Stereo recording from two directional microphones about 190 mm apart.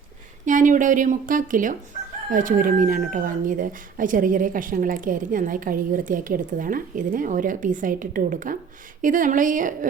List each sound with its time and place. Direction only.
0.4 s speech: 45° right (ahead or behind)